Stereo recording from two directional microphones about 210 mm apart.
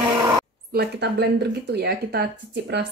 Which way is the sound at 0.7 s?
50° right (ahead or behind).